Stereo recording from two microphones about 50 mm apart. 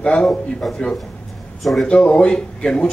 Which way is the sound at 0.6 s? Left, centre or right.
Centre.